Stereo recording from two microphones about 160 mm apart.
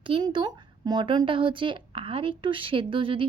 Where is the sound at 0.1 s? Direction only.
30° right (ahead or behind).